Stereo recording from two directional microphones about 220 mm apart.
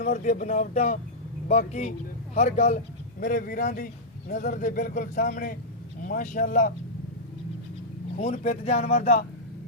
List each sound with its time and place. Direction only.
0.0 s speech: 35° left (ahead or behind)
8.2 s speech: 30° left (ahead or behind)